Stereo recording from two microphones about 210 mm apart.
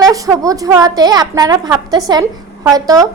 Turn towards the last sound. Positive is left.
turn(degrees=-15)  # may be behind; listen again after turning